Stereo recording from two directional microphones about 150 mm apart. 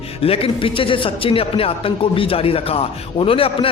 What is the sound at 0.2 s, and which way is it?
Speech, 40° left (ahead or behind).